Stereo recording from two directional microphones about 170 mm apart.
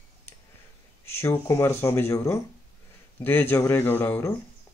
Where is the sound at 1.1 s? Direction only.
15° left (ahead or behind).